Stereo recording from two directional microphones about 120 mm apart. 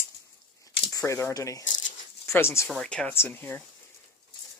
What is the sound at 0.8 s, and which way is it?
Speech, 30° left (ahead or behind).